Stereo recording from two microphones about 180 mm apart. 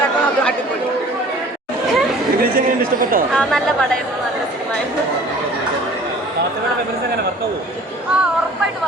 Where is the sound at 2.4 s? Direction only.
50° right (ahead or behind).